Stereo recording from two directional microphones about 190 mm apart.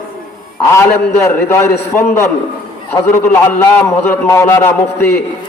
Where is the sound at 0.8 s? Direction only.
15° left (ahead or behind).